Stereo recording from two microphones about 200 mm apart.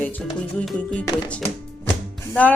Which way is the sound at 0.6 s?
5° left (ahead or behind).